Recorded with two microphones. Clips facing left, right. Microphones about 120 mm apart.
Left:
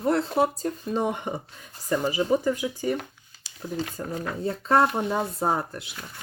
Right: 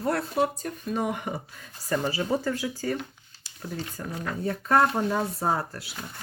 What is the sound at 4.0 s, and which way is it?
Speech, 20° left (ahead or behind).